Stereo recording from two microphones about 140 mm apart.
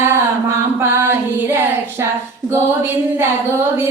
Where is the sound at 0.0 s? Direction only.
15° right (ahead or behind).